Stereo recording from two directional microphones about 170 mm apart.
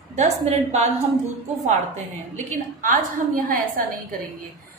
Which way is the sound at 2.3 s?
50° right (ahead or behind).